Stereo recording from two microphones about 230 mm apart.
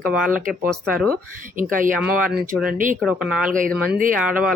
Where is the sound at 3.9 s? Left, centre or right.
Right.